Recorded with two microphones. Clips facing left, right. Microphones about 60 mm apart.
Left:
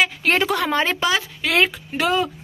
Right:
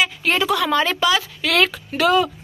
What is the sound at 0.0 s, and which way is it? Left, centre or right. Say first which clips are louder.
A woman's voice: left 1 dB; left.